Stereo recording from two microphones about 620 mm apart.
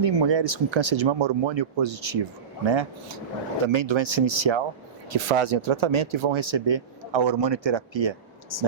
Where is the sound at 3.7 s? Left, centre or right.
Right.